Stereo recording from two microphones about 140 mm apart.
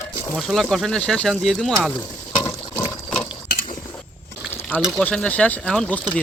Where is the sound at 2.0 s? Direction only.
20° left (ahead or behind).